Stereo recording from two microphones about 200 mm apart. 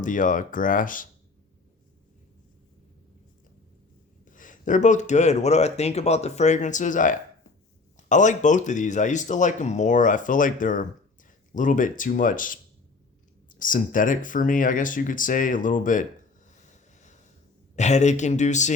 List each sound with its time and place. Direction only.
0.0 s speech: 40° left (ahead or behind)
4.3 s speech: 40° left (ahead or behind)
16.5 s a sound: 35° left (ahead or behind)
17.7 s speech: 35° left (ahead or behind)